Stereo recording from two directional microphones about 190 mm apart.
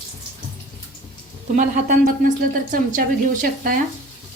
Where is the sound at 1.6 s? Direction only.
45° right (ahead or behind).